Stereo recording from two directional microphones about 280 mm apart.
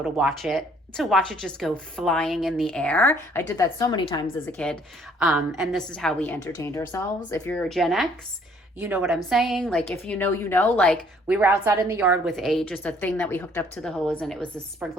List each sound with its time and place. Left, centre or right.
0.0 s speech: centre
4.5 s speech: centre
11.3 s speech: centre